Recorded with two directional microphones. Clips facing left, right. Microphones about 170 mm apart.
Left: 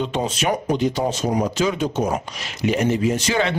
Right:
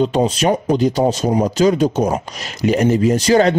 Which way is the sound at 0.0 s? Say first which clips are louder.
Right 7 dB; 35° right (ahead or behind).